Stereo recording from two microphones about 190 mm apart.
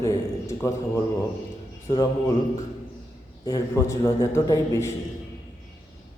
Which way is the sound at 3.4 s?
15° left (ahead or behind).